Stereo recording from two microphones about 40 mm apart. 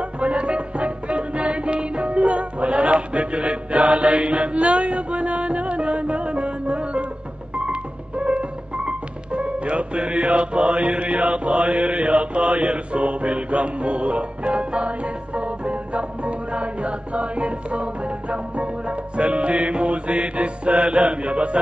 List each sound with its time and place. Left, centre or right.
0.0 s music: right